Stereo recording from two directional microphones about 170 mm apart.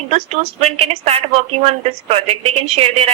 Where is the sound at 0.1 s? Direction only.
40° right (ahead or behind).